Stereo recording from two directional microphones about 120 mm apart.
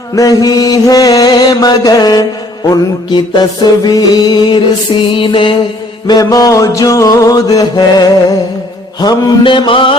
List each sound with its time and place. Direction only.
0.2 s mantra: 30° left (ahead or behind)
6.1 s music: 30° left (ahead or behind)
9.0 s mantra: 35° left (ahead or behind)